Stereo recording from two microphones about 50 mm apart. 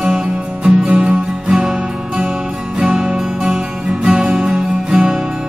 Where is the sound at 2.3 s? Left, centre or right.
Centre.